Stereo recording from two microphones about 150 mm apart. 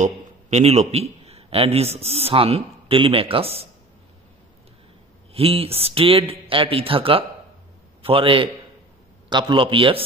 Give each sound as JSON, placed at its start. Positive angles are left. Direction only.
{"t": 0.0, "sound": "a man's voice", "side_deg": -50}
{"t": 5.3, "sound": "a man's voice", "side_deg": -40}